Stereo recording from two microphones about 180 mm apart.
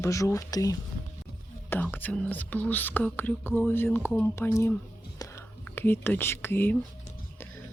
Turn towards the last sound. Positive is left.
turn(degrees=10)  # may be behind; listen again after turning